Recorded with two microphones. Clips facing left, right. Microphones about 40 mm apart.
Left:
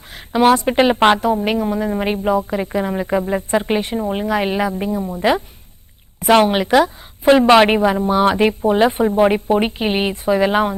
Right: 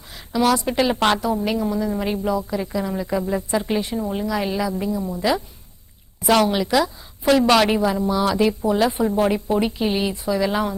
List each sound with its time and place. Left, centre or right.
0.1 s a woman's voice: left